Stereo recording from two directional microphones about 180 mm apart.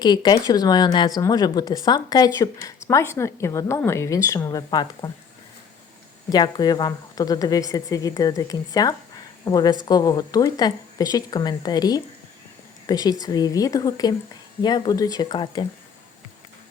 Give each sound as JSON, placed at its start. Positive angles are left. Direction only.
{"t": 0.0, "sound": "speech", "side_deg": 25}
{"t": 6.3, "sound": "speech", "side_deg": 20}